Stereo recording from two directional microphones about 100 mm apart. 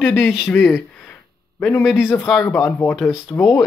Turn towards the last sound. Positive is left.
turn(degrees=15)  # may be behind; listen again after turning